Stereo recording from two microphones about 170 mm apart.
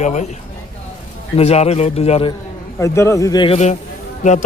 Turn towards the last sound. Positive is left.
turn(degrees=45)  # may be behind; listen again after turning